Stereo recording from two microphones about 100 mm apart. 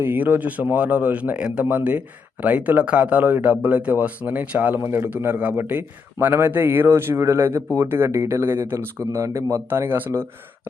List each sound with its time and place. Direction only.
0.0 s speech: 20° right (ahead or behind)